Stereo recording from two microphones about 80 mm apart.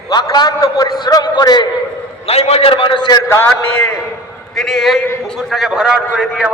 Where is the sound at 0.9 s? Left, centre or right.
Left.